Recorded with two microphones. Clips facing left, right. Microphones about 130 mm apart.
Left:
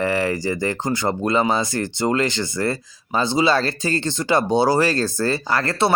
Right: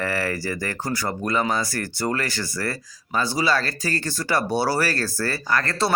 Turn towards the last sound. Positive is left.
turn(degrees=25)  # may be behind; listen again after turning